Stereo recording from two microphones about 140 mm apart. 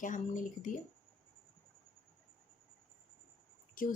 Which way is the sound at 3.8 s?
75° left (ahead or behind).